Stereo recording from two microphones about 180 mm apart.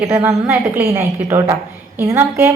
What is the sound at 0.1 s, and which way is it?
A woman's voice, 15° right (ahead or behind).